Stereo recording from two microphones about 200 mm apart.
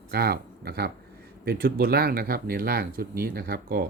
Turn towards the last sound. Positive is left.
turn(degrees=-50)  # may be behind; listen again after turning